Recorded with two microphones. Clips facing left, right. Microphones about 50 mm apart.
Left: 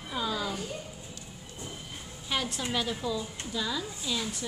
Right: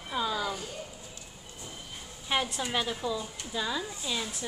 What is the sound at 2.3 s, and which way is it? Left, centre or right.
A woman's voice, right.